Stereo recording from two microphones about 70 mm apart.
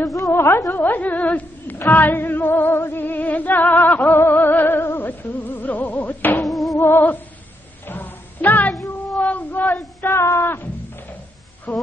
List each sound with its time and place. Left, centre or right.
0.0 s a woman's voice: left
0.3 s a woman's voice: left
0.9 s music: left
6.4 s music: centre
6.8 s music: left
7.8 s a sound: left
9.2 s child singing: left
10.0 s music: left
11.7 s music: centre